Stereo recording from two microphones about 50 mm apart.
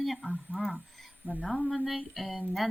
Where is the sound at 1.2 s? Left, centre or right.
Right.